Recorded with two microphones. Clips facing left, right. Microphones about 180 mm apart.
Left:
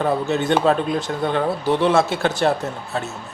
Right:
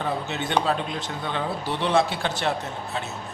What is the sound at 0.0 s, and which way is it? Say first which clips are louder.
Speech: left 8 dB; 40° left (ahead or behind).